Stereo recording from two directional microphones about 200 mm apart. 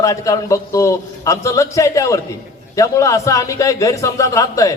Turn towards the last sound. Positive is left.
turn(degrees=15)  # may be behind; listen again after turning